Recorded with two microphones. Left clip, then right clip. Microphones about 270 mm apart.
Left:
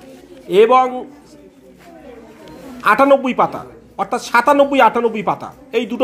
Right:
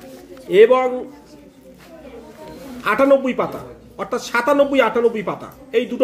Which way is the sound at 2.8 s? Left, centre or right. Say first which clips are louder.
Left 3 dB; centre.